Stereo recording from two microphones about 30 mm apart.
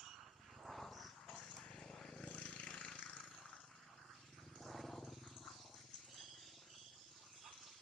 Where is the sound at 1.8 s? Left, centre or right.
Centre.